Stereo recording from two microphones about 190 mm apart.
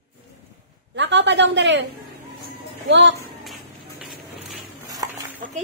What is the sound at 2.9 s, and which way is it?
Speech, 70° right (ahead or behind).